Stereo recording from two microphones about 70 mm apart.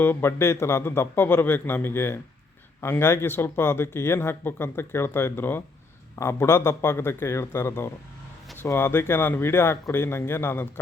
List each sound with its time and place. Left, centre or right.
0.0 s speech: left
6.1 s speech: left